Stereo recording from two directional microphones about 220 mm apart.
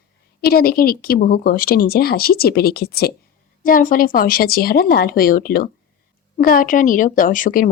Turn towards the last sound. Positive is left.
turn(degrees=35)  # may be behind; listen again after turning